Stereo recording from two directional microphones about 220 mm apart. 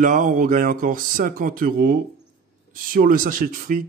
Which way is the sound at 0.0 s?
35° right (ahead or behind).